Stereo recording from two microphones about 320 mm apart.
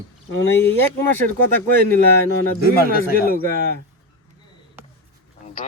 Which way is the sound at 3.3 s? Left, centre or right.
Right.